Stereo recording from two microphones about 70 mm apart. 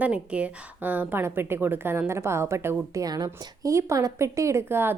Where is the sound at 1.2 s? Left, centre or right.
Right.